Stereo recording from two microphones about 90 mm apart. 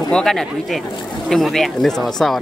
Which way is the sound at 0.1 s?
5° left (ahead or behind).